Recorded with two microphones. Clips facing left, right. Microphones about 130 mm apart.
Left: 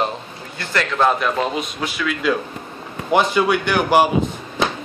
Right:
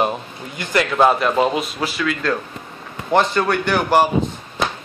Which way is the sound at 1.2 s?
Centre (ahead or behind).